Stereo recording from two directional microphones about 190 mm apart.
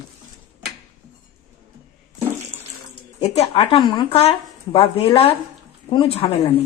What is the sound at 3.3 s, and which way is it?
A woman's voice, 30° left (ahead or behind).